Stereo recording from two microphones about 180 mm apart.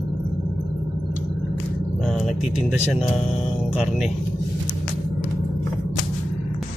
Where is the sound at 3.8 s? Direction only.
5° right (ahead or behind).